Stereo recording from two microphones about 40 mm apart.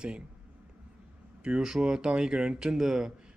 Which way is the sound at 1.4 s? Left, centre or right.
Centre.